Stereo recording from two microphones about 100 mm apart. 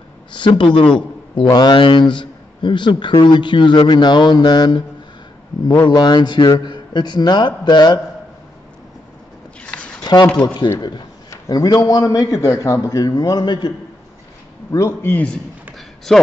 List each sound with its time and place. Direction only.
0.3 s a man's voice: 50° left (ahead or behind)
5.9 s a man's voice: 45° left (ahead or behind)
9.6 s zipper: 10° left (ahead or behind)
10.0 s a man's voice: 45° left (ahead or behind)
11.2 s a sound: 30° left (ahead or behind)
11.8 s a man's voice: 35° left (ahead or behind)
14.7 s a man's voice: 30° left (ahead or behind)
15.1 s a man's voice: 10° left (ahead or behind)